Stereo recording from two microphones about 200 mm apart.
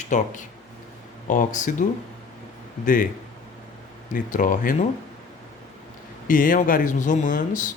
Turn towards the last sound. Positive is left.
turn(degrees=40)  # may be behind; listen again after turning